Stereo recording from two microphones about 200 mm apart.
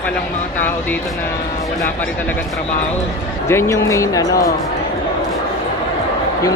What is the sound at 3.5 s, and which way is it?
Speech, 15° left (ahead or behind).